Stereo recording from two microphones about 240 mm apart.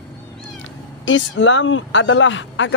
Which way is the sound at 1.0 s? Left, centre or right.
Left.